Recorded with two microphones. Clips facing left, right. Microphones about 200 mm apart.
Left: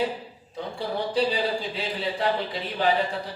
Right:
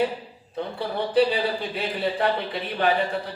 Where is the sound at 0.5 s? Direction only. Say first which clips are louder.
Right 2 dB; 60° right (ahead or behind).